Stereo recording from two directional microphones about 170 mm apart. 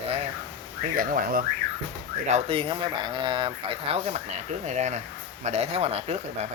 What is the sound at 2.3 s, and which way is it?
Speech, 30° right (ahead or behind).